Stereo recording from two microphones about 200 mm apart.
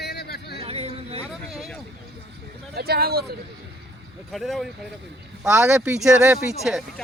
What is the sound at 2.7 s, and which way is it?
Speech, 50° right (ahead or behind).